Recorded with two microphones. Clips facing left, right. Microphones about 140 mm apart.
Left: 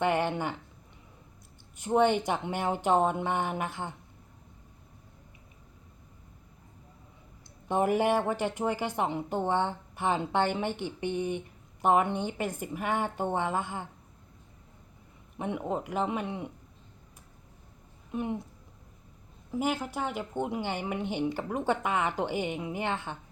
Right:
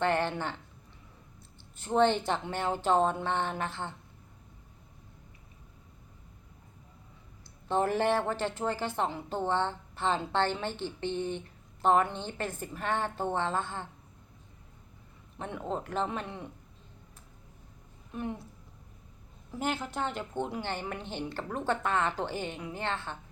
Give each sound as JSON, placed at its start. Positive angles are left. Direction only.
{"t": 0.0, "sound": "a woman's voice", "side_deg": 15}
{"t": 1.7, "sound": "a woman's voice", "side_deg": 15}
{"t": 7.7, "sound": "a woman's voice", "side_deg": 15}
{"t": 15.4, "sound": "a woman's voice", "side_deg": 15}
{"t": 18.1, "sound": "speech", "side_deg": 20}
{"t": 19.5, "sound": "a woman's voice", "side_deg": 10}